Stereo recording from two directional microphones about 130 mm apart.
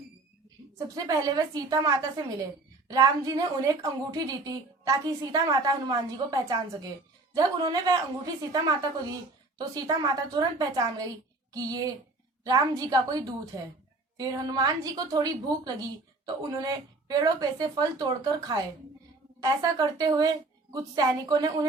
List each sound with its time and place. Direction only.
0.9 s a woman's voice: 25° right (ahead or behind)